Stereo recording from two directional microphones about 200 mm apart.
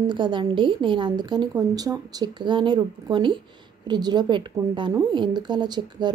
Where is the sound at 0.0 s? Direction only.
25° right (ahead or behind).